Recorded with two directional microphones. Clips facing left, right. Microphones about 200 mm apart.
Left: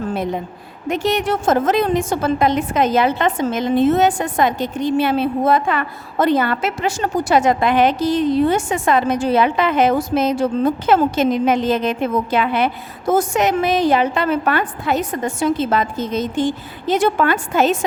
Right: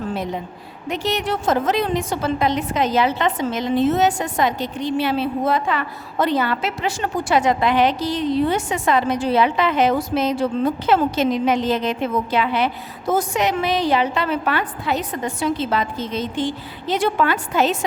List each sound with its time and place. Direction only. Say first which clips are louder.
0.9 s a woman's voice: left 4 dB; 50° left (ahead or behind)